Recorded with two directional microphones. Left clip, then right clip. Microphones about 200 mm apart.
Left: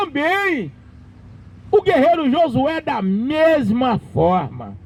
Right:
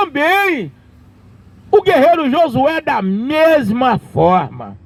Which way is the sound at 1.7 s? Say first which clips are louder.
Right 4 dB; 25° right (ahead or behind).